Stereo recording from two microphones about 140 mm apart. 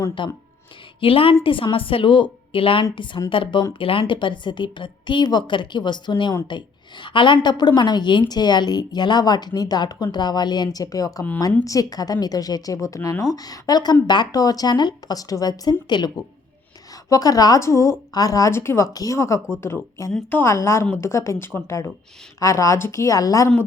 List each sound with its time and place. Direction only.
0.2 s a woman's voice: 35° left (ahead or behind)